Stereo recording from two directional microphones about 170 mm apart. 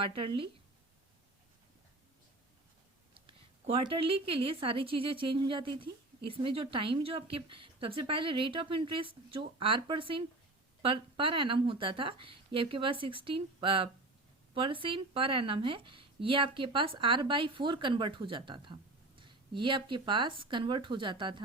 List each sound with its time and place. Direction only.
0.0 s a woman's voice: 30° right (ahead or behind)
3.2 s a woman's voice: 30° right (ahead or behind)